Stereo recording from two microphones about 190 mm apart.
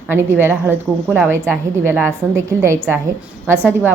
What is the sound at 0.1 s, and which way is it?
A woman's voice, 10° right (ahead or behind).